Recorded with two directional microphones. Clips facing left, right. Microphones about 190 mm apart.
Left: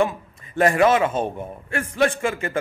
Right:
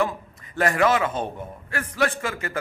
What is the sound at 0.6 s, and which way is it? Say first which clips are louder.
A man's voice: left 4 dB; 25° left (ahead or behind).